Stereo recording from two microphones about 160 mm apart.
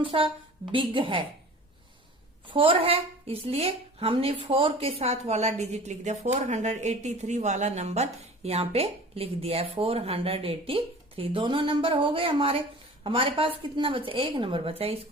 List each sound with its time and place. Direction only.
0.0 s a woman's voice: 35° right (ahead or behind)
2.5 s a woman's voice: 35° right (ahead or behind)